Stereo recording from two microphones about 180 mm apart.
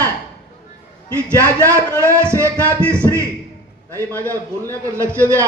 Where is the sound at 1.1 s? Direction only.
15° right (ahead or behind).